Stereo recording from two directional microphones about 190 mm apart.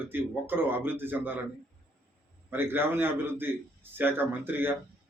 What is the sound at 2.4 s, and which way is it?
A man's voice, 10° right (ahead or behind).